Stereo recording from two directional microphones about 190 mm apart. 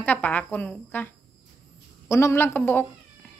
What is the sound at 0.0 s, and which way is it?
A woman's voice, 10° left (ahead or behind).